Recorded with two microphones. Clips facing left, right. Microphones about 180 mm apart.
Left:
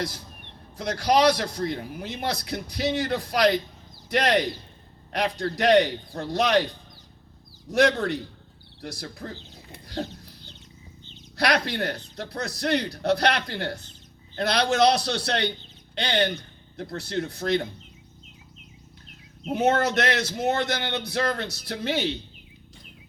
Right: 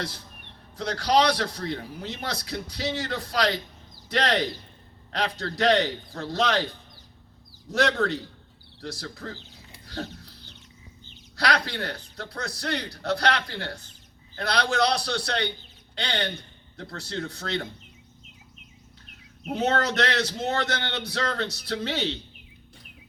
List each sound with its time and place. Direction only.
0.8 s a man's voice: 15° left (ahead or behind)
7.7 s a man's voice: 15° left (ahead or behind)
11.3 s a man's voice: 20° left (ahead or behind)
19.5 s a man's voice: 15° left (ahead or behind)